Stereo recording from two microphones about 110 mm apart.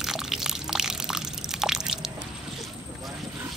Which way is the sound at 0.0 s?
5° right (ahead or behind).